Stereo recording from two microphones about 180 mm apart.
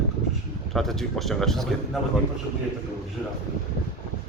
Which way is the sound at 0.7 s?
Centre (ahead or behind).